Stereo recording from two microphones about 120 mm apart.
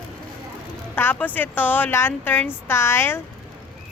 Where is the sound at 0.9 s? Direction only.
15° left (ahead or behind).